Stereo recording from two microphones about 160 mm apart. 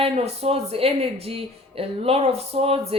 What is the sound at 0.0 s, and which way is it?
Speech, 40° right (ahead or behind).